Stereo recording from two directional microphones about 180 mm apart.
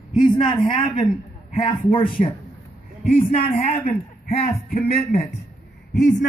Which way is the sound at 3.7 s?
35° left (ahead or behind).